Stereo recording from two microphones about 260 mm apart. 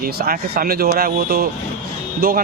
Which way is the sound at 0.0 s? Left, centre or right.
Right.